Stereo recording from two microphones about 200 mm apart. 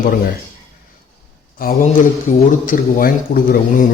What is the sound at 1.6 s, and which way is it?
Speech, 45° left (ahead or behind).